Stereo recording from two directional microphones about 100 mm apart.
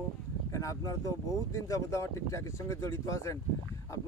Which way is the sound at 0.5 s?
35° left (ahead or behind).